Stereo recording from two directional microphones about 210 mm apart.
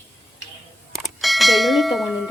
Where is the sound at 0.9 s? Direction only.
Centre (ahead or behind).